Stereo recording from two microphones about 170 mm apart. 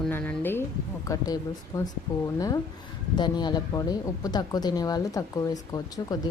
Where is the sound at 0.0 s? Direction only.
10° left (ahead or behind).